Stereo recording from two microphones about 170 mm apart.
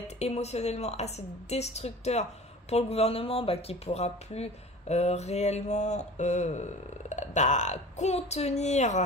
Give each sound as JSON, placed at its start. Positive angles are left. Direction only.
{"t": 0.2, "sound": "speech", "side_deg": 40}